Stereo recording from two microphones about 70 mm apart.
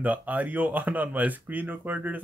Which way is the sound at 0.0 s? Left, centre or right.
Right.